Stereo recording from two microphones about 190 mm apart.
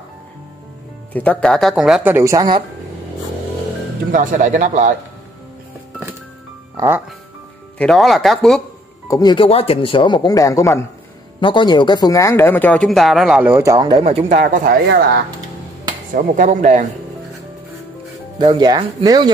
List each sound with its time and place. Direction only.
1.1 s speech: 5° left (ahead or behind); by 2.6 s 20° right (ahead or behind)
4.1 s a man's voice: 40° right (ahead or behind)
7.8 s speech: centre (ahead or behind)
9.0 s speech: 20° left (ahead or behind); by 14.2 s 30° right (ahead or behind)
14.3 s speech: 45° right (ahead or behind)
16.2 s a man's voice: 40° right (ahead or behind)
18.5 s speech: 25° right (ahead or behind)